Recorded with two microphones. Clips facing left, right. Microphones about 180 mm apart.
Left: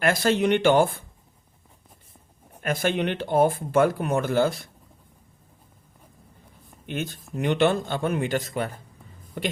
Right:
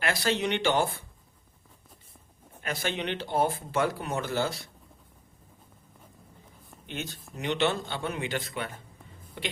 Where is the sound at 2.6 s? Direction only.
50° left (ahead or behind).